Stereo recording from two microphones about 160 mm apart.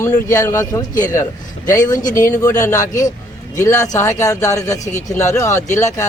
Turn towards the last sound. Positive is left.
turn(degrees=20)  # may be behind; listen again after turning